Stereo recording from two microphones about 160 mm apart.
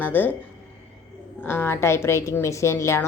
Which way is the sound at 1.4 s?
15° left (ahead or behind).